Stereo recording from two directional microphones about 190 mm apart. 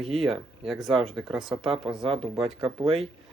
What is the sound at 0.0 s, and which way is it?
Speech, centre (ahead or behind).